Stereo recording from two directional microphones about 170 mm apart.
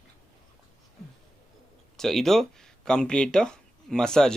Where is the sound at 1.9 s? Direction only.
Centre (ahead or behind).